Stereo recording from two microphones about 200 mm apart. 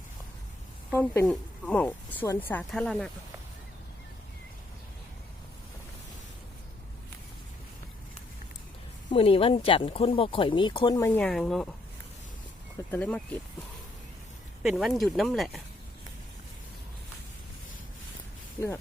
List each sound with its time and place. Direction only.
0.9 s a woman's voice: 10° left (ahead or behind)
9.0 s speech: 30° left (ahead or behind); by 11.7 s centre (ahead or behind)
12.9 s a woman's voice: 5° left (ahead or behind)
14.6 s speech: centre (ahead or behind)